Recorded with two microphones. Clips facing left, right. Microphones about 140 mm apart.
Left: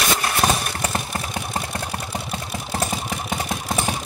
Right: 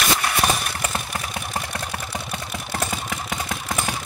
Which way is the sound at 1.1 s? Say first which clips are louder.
Left 2 dB; 30° left (ahead or behind).